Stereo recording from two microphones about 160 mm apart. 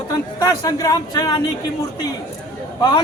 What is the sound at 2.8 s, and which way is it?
Speech, 25° left (ahead or behind).